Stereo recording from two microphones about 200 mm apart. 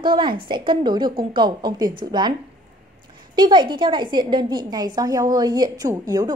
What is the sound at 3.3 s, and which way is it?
A woman's voice, 20° right (ahead or behind).